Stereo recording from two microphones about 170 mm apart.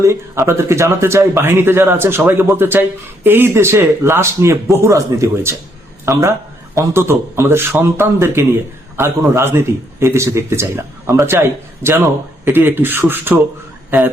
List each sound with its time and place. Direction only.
0.0 s speech: 15° right (ahead or behind)